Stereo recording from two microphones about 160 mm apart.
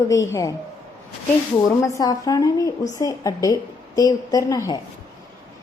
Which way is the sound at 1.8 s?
20° left (ahead or behind).